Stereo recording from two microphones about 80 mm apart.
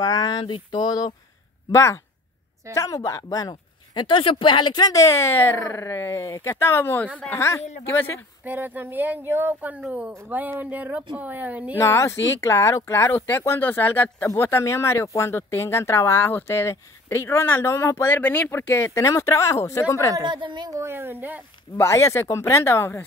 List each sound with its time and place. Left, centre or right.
0.0 s speech: left
1.7 s speech: left
3.9 s speech: left
8.5 s speech: right
11.7 s speech: left
18.9 s speech: left
20.2 s a woman's voice: right
20.7 s speech: right
21.7 s speech: left